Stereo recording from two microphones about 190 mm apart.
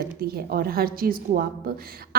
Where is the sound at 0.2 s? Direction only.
50° right (ahead or behind).